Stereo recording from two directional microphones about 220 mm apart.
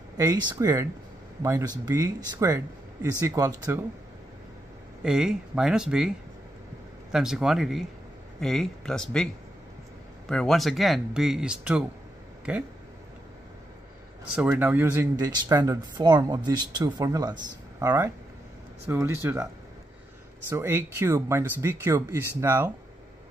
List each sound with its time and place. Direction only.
0.2 s speech: 15° right (ahead or behind)
5.0 s speech: 5° right (ahead or behind)
14.3 s speech: 5° right (ahead or behind)